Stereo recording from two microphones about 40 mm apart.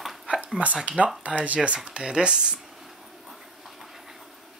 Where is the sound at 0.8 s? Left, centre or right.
Right.